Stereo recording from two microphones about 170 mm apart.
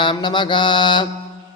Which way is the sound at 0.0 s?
30° left (ahead or behind).